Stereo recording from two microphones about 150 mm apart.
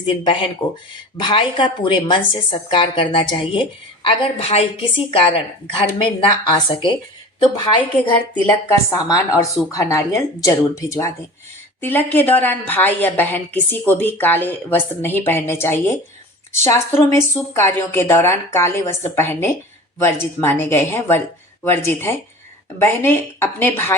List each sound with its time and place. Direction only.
0.0 s a woman's voice: 35° left (ahead or behind); by 24.0 s 15° left (ahead or behind)